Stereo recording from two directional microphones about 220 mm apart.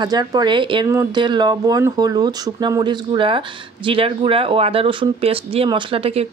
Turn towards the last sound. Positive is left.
turn(degrees=-25)  # may be behind; listen again after turning